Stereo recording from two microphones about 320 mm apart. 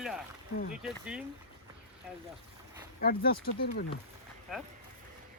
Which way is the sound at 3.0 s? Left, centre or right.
Left.